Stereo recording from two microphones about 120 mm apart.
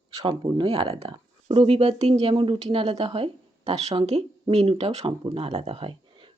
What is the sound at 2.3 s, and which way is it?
Speech, 45° right (ahead or behind).